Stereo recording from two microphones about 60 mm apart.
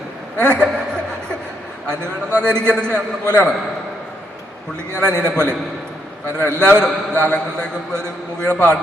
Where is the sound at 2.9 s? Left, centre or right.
Right.